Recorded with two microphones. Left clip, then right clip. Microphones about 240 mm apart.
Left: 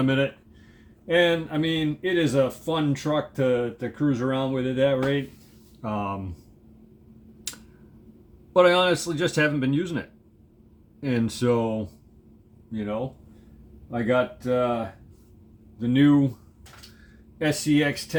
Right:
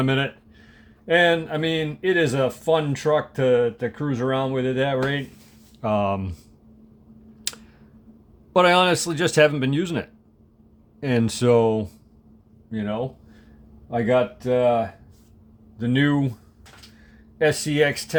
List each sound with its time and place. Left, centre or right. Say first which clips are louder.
0.0 s speech: right 1 dB; right
8.5 s speech: right 2 dB; right
15.8 s speech: left 1 dB; right